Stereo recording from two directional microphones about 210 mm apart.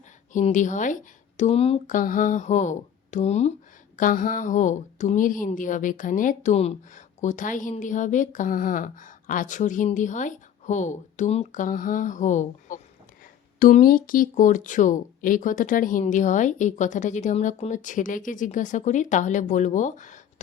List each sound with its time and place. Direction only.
0.3 s a woman's voice: 35° left (ahead or behind)
2.0 s a woman's voice: 40° left (ahead or behind)